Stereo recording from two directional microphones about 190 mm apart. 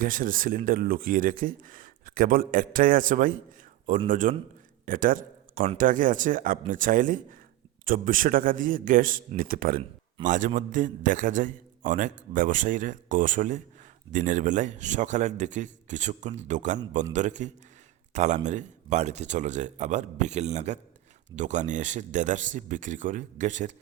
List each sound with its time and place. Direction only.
0.0 s a man's voice: 45° right (ahead or behind)